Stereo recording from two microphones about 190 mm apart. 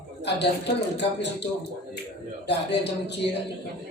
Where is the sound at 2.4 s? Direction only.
65° left (ahead or behind).